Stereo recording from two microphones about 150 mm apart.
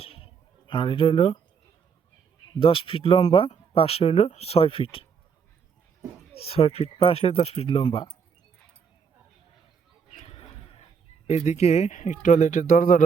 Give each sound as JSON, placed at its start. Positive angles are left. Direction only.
{"t": 0.0, "sound": "a sound", "side_deg": 40}
{"t": 0.7, "sound": "speech", "side_deg": 35}
{"t": 2.6, "sound": "speech", "side_deg": 35}
{"t": 6.3, "sound": "speech", "side_deg": 40}
{"t": 10.2, "sound": "a sound", "side_deg": 40}
{"t": 11.3, "sound": "speech", "side_deg": 50}